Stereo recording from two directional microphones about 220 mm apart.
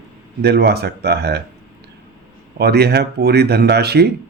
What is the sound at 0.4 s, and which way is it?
Speech, 45° right (ahead or behind).